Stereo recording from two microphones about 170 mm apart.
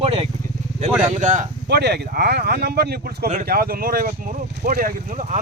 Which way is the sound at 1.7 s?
75° right (ahead or behind).